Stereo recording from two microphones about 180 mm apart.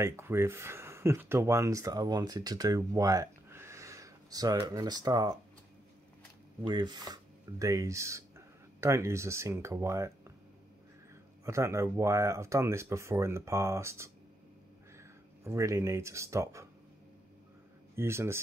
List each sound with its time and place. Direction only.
0.0 s speech: 15° right (ahead or behind)
6.6 s speech: 25° right (ahead or behind)
11.4 s speech: 15° right (ahead or behind)
15.4 s speech: 15° right (ahead or behind)
17.9 s speech: 15° right (ahead or behind)